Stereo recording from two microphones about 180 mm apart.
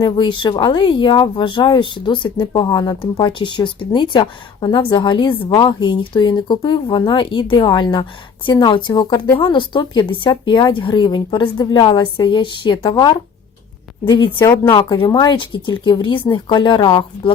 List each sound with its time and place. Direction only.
0.0 s speech: 25° left (ahead or behind)
14.4 s speech: 10° left (ahead or behind)
14.7 s speech: 25° left (ahead or behind)